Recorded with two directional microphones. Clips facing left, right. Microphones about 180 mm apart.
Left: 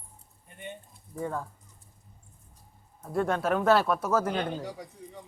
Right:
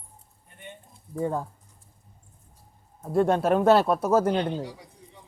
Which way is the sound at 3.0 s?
25° right (ahead or behind).